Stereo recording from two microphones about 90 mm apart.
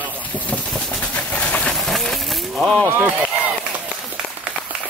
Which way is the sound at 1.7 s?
5° left (ahead or behind).